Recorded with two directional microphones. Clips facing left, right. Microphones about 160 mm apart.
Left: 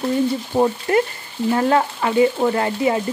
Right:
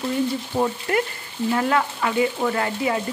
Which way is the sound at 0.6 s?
30° left (ahead or behind).